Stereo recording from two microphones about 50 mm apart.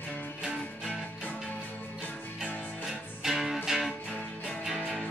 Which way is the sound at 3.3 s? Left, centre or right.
Centre.